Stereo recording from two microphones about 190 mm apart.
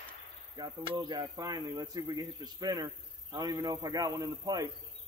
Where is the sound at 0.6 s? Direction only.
20° right (ahead or behind).